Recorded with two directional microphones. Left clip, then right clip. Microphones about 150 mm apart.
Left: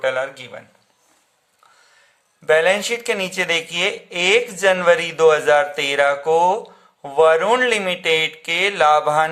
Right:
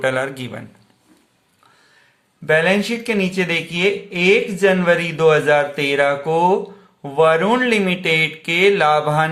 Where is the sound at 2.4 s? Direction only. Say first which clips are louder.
Even; 30° left (ahead or behind).